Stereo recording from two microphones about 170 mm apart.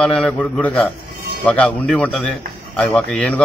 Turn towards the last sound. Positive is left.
turn(degrees=5)  # may be behind; listen again after turning